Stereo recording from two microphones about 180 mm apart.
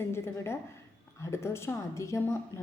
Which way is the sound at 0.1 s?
15° left (ahead or behind).